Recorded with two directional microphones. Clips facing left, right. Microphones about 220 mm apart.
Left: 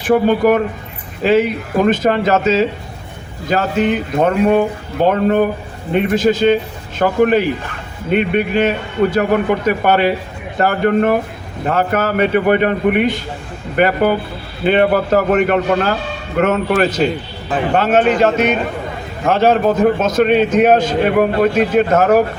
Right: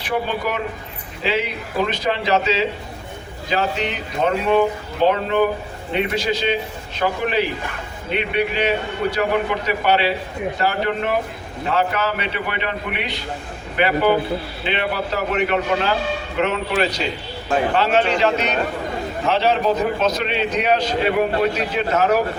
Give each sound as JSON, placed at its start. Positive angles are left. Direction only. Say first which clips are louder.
{"t": 0.0, "sound": "a man's voice", "louder": "left 11 dB", "side_deg": 50}